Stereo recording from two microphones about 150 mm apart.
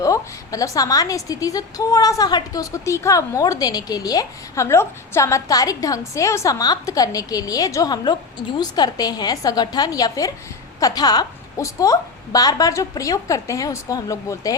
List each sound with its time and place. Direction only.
0.0 s a woman's voice: 20° left (ahead or behind)